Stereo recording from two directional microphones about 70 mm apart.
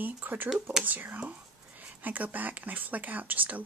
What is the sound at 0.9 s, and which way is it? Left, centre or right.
Speech, right.